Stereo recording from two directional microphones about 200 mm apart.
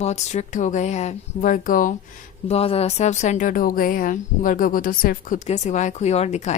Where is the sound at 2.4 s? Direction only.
30° left (ahead or behind).